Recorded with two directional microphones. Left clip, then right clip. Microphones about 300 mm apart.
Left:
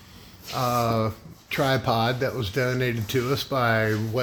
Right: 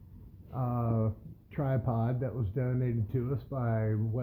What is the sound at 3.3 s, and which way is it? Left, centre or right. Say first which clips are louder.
Speech: left 16 dB; left.